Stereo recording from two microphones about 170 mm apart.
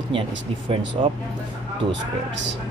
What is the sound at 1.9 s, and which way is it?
Speech, 90° right.